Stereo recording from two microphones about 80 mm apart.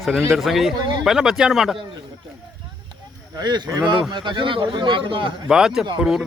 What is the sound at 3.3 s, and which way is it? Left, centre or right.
Speech, right.